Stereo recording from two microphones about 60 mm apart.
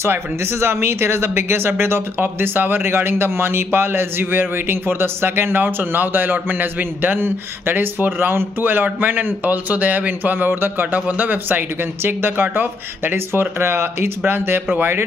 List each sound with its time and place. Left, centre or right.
0.0 s speech: right
11.0 s speech: right